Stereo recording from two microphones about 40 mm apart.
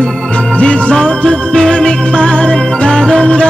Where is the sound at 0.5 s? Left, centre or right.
Left.